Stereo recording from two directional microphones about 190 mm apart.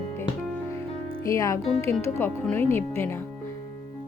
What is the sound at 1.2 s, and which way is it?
Speech, 15° left (ahead or behind).